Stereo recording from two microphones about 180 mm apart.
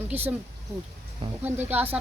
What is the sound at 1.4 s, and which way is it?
Speech, 10° right (ahead or behind).